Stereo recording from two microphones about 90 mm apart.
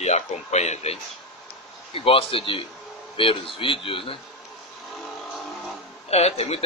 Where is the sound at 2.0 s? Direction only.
90° left.